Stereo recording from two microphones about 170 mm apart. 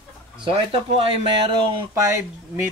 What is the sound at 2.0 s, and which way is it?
Speech, 15° right (ahead or behind).